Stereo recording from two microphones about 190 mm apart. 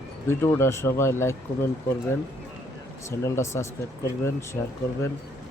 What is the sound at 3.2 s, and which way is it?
Speech, 15° left (ahead or behind).